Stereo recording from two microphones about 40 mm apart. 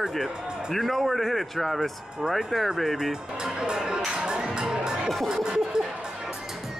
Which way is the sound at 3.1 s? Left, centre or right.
Centre.